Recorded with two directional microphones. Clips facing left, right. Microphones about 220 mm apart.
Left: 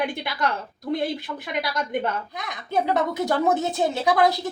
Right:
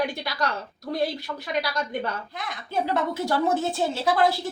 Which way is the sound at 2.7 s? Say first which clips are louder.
Left 3 dB; 20° left (ahead or behind).